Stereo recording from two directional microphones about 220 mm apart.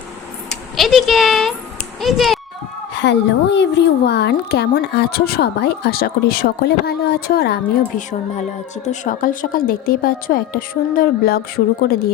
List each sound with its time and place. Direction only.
0.8 s a child's voice: centre (ahead or behind)
2.9 s a woman's voice: 50° left (ahead or behind)
8.4 s a woman's voice: 35° left (ahead or behind)